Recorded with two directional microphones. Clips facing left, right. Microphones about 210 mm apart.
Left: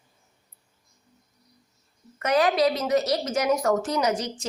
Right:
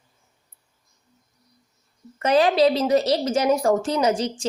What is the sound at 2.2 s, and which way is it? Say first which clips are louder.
A woman's voice: right 4 dB; 30° right (ahead or behind).